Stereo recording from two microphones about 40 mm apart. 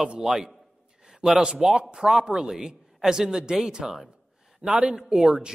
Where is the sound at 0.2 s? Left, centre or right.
Centre.